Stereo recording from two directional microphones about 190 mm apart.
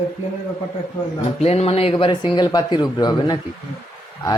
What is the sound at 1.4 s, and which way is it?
Speech, 35° left (ahead or behind).